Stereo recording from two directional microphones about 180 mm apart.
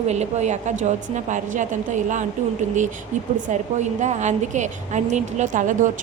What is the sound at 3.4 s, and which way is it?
A woman's voice, 40° right (ahead or behind).